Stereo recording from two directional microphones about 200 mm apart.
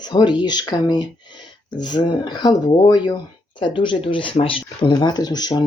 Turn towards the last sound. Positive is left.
turn(degrees=20)  # may be behind; listen again after turning